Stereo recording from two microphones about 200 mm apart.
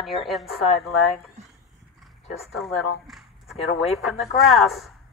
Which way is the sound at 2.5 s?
Centre (ahead or behind).